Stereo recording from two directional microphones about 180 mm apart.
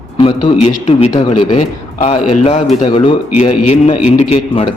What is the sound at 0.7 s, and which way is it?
A man's voice, 35° left (ahead or behind).